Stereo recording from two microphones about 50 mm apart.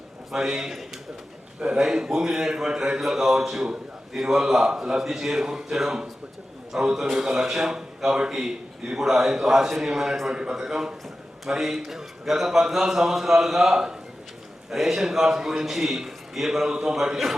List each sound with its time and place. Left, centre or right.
0.3 s a man's voice: centre